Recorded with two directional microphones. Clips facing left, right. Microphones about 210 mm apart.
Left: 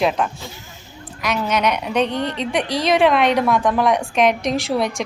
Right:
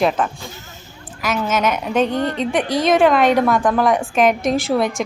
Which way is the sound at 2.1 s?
45° right (ahead or behind).